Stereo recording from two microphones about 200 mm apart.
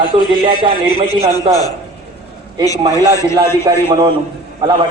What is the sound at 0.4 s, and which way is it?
Speech, 25° right (ahead or behind).